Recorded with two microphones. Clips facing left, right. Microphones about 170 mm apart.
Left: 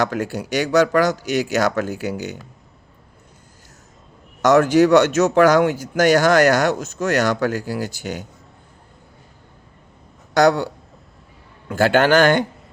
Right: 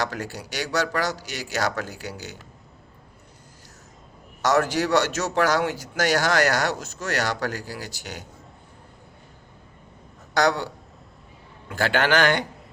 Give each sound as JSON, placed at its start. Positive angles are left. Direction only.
{"t": 0.0, "sound": "speech", "side_deg": 50}
{"t": 4.4, "sound": "speech", "side_deg": 55}
{"t": 10.3, "sound": "speech", "side_deg": 50}
{"t": 11.7, "sound": "speech", "side_deg": 45}